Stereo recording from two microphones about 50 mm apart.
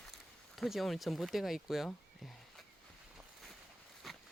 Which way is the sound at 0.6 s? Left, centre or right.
Centre.